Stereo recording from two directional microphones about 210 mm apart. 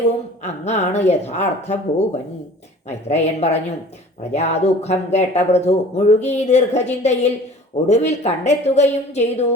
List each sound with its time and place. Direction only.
0.4 s speech: 30° left (ahead or behind)